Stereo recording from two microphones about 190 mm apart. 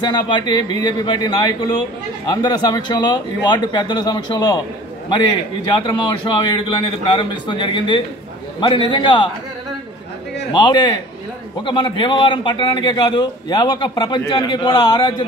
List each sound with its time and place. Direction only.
0.0 s a man's voice: 25° left (ahead or behind)
5.7 s a man's voice: 25° left (ahead or behind)
10.5 s a man's voice: 25° left (ahead or behind)